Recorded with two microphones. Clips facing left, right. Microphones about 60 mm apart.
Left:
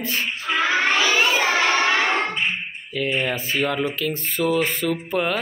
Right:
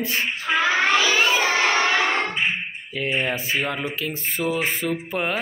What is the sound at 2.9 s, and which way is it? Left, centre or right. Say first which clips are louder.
Speech: left 1 dB; right.